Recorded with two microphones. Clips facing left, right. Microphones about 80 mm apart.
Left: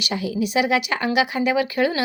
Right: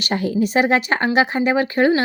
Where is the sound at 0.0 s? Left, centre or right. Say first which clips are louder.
Right 4 dB; right.